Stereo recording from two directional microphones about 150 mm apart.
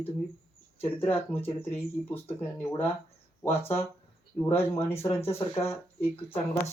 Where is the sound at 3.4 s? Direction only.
15° left (ahead or behind).